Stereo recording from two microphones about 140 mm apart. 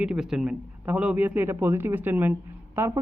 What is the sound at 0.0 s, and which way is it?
Speech, 5° right (ahead or behind).